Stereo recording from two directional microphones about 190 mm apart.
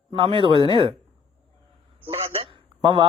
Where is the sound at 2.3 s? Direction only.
30° right (ahead or behind).